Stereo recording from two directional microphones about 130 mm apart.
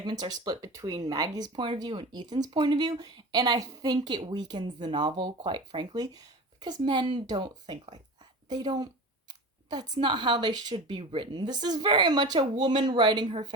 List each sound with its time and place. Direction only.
0.0 s speech: 35° right (ahead or behind)